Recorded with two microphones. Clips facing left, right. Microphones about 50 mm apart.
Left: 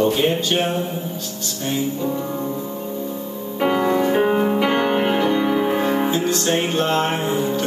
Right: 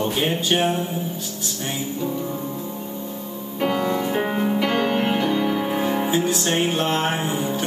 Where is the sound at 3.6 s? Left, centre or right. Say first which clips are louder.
Left 4 dB; centre.